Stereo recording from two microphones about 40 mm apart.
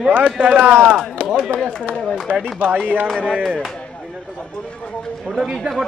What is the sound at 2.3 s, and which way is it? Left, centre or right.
Speech, right.